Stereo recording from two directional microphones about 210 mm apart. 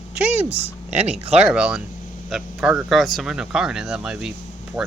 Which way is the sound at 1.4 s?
5° right (ahead or behind).